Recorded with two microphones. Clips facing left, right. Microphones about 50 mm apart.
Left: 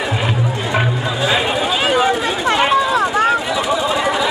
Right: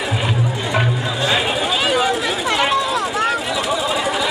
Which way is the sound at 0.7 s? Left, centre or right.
Centre.